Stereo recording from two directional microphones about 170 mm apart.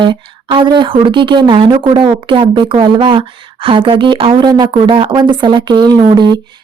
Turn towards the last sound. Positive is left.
turn(degrees=-25)  # may be behind; listen again after turning